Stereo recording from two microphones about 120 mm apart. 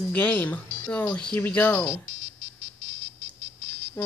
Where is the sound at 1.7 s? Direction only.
25° left (ahead or behind).